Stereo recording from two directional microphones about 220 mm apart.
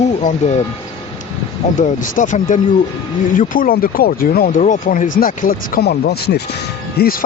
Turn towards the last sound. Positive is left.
turn(degrees=40)  # may be behind; listen again after turning